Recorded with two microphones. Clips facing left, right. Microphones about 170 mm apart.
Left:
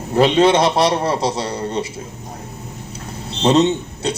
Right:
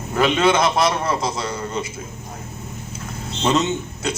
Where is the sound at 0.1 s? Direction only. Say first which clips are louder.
Left 4 dB; 35° left (ahead or behind).